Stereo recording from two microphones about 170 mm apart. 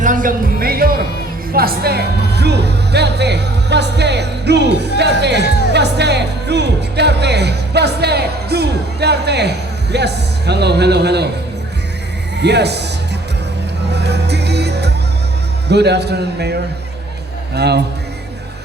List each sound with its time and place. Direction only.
0.0 s music: 50° right (ahead or behind)
1.5 s speech: 65° right (ahead or behind)
12.4 s speech: 80° right
13.9 s music: 80° right
15.7 s a man's voice: 80° right